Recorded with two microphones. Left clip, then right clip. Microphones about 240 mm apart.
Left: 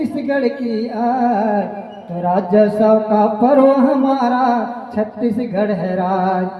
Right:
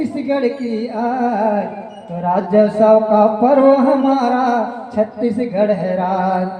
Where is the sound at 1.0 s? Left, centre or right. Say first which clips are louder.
Left 1 dB; left.